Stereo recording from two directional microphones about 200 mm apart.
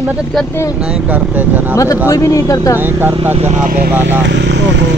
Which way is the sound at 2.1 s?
15° left (ahead or behind).